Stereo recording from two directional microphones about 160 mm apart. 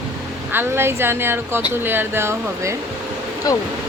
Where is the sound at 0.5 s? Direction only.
15° right (ahead or behind).